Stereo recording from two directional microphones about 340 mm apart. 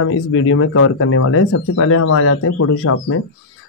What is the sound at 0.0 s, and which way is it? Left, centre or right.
A man's voice, left.